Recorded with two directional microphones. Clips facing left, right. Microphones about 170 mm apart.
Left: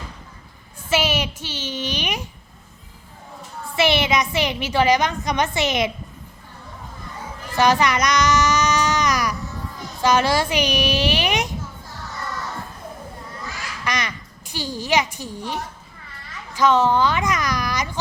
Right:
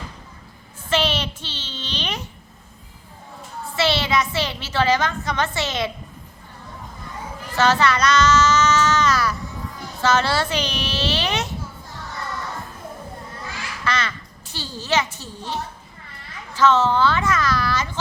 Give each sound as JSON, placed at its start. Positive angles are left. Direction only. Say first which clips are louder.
{"t": 0.9, "sound": "a sound", "louder": "left 1 dB", "side_deg": 10}
{"t": 3.8, "sound": "a woman's voice", "louder": "left 2 dB", "side_deg": 15}
{"t": 7.5, "sound": "child singing", "louder": "left 1 dB", "side_deg": 15}
{"t": 10.0, "sound": "a woman's voice", "louder": "left 2 dB", "side_deg": 15}
{"t": 13.8, "sound": "a child's voice", "louder": "right 1 dB", "side_deg": 15}